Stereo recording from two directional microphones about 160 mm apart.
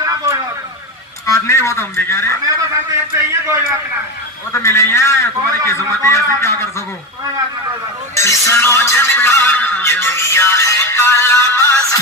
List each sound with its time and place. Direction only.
0.0 s a sound: 20° right (ahead or behind)
1.3 s music: 20° left (ahead or behind)
3.2 s a man's voice: 15° right (ahead or behind)
4.5 s music: 15° left (ahead or behind)
8.1 s music: 20° left (ahead or behind)